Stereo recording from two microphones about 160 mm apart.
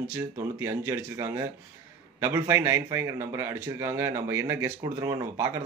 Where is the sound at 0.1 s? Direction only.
15° right (ahead or behind).